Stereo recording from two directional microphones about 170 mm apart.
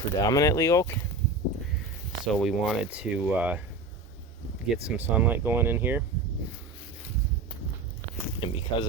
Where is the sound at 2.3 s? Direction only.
5° right (ahead or behind).